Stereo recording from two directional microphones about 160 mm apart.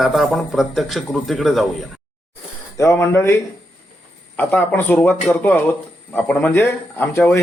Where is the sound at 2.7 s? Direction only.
20° left (ahead or behind).